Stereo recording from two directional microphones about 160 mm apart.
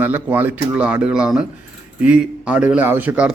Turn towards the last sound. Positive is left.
turn(degrees=-10)  # may be behind; listen again after turning